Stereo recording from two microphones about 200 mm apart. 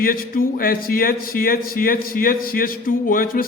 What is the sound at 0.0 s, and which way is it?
A man's voice, 45° left (ahead or behind).